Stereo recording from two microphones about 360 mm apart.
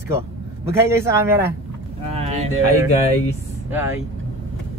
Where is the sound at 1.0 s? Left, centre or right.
Centre.